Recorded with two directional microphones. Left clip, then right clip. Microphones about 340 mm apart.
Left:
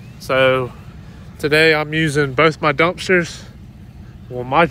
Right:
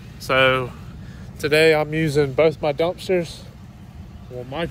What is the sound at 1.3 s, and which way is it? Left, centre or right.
Speech, left.